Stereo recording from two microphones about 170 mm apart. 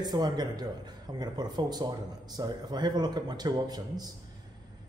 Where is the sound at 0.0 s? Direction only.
25° right (ahead or behind).